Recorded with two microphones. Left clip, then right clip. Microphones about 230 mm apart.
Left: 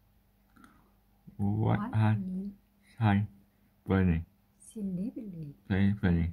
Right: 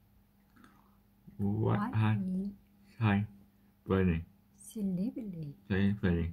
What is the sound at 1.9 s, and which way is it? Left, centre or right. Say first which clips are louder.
Speech: left 2 dB; left.